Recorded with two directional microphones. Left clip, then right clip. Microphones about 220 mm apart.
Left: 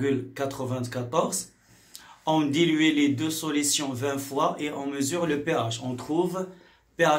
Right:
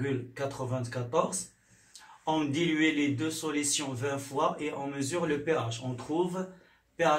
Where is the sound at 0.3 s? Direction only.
45° left (ahead or behind).